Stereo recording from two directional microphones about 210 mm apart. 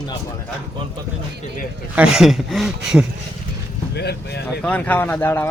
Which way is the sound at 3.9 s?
50° left (ahead or behind).